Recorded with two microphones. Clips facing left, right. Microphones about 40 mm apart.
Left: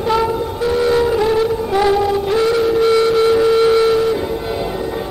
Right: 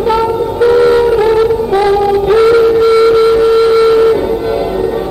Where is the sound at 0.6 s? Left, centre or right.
Right.